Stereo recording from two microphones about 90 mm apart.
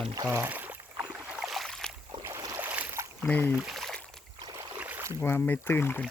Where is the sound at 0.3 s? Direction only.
20° right (ahead or behind).